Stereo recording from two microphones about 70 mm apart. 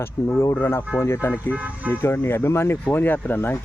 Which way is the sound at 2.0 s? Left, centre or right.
Left.